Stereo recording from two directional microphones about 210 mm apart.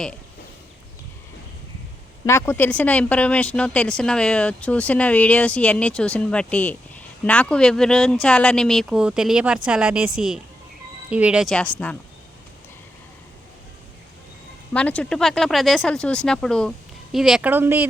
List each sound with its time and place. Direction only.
2.2 s speech: 10° left (ahead or behind)
14.7 s speech: 5° left (ahead or behind); by 17.8 s 10° right (ahead or behind)